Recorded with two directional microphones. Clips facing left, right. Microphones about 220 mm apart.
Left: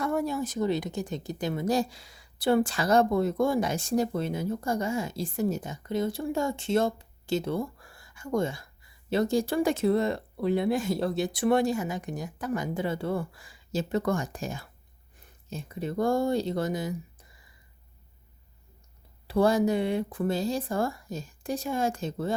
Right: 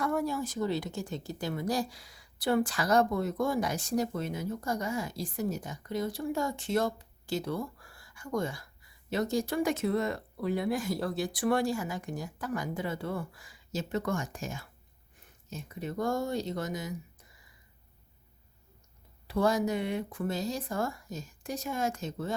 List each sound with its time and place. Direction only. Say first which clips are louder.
0.0 s speech: left 2 dB; 25° left (ahead or behind)
19.3 s speech: left 5 dB; 30° left (ahead or behind)